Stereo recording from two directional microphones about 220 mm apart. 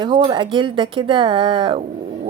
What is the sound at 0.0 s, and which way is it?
Speech, 20° right (ahead or behind).